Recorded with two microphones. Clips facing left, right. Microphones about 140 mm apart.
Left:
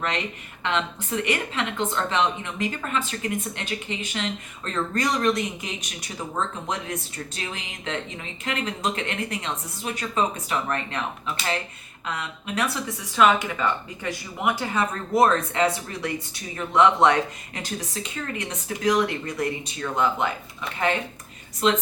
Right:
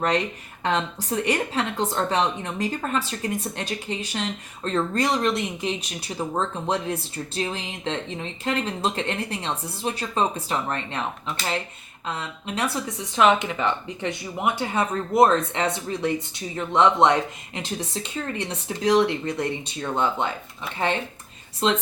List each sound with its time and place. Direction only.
0.6 s a woman's voice: 35° right (ahead or behind)
12.0 s speech: 25° right (ahead or behind)
21.6 s speech: 30° right (ahead or behind)